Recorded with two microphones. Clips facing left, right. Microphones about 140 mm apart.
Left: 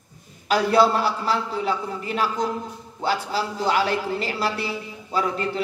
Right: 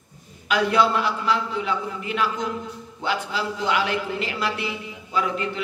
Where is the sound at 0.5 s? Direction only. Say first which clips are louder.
Left 2 dB; 35° left (ahead or behind).